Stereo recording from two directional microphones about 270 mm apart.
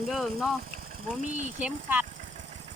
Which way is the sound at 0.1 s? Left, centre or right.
Centre.